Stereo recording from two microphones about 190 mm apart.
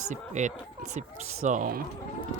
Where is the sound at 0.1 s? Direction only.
40° right (ahead or behind).